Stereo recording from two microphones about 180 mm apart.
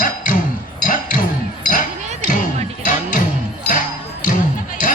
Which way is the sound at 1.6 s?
45° left (ahead or behind).